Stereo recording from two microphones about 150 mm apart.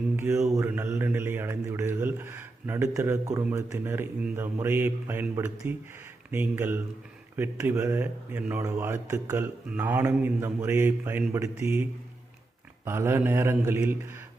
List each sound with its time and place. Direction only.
0.2 s a man's voice: 15° right (ahead or behind)